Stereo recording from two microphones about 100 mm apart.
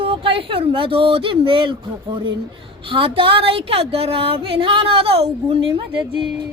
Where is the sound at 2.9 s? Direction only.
60° right (ahead or behind).